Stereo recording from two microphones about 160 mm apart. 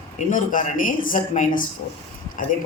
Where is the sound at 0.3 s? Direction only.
55° left (ahead or behind).